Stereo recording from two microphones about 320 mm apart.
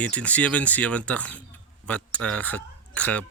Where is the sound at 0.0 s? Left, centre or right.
Centre.